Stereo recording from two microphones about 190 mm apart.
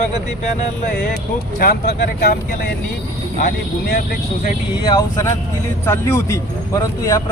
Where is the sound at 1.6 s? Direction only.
55° left (ahead or behind).